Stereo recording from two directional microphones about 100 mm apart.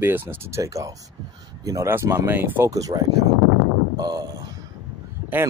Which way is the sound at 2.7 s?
35° right (ahead or behind).